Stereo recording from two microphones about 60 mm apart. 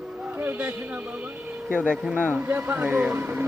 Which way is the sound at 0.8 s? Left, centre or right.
Right.